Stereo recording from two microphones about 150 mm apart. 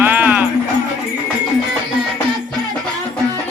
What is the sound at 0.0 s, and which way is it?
Music, 10° right (ahead or behind).